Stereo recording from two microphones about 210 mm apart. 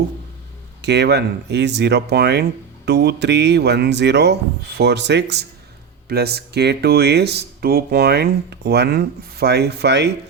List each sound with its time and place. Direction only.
0.8 s speech: 55° right (ahead or behind)